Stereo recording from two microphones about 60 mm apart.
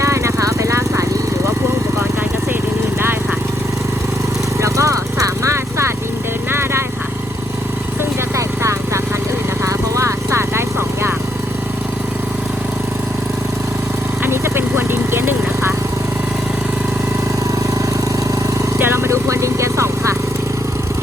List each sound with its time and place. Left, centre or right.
0.0 s vehicle: right
4.6 s lawn mower: right
6.5 s vehicle: right
8.4 s vehicle: right
14.3 s vehicle: right
18.8 s vehicle: right